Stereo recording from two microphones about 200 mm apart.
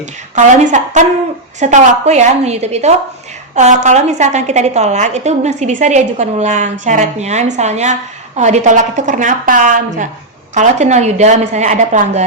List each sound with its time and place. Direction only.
0.3 s a woman's voice: 35° right (ahead or behind)